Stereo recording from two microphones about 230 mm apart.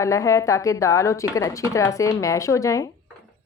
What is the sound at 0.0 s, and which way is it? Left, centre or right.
Speech, centre.